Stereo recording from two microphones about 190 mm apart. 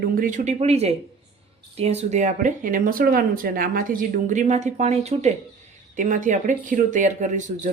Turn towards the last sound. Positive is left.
turn(degrees=-40)  # may be behind; listen again after turning